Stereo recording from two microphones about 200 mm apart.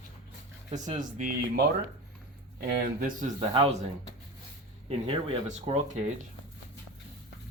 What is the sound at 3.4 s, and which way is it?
Speech, 25° right (ahead or behind).